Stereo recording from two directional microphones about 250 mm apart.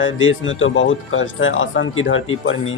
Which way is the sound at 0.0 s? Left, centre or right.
Left.